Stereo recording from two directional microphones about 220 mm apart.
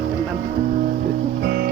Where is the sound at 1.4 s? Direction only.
45° right (ahead or behind).